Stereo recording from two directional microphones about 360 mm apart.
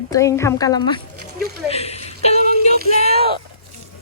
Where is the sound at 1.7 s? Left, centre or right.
Centre.